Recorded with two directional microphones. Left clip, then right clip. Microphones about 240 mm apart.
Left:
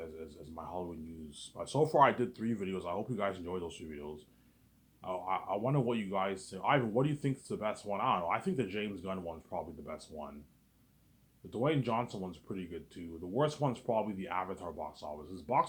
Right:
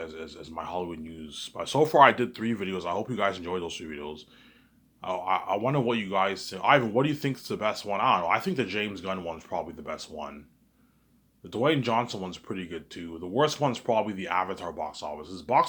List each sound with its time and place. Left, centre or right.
0.0 s speech: right
11.5 s speech: right